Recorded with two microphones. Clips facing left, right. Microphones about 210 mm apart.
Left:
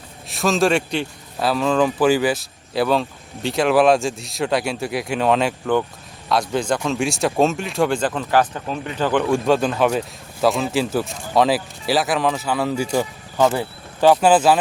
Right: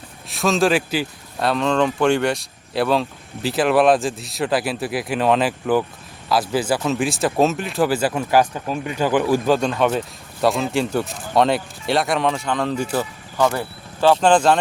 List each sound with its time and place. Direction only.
0.3 s speech: centre (ahead or behind)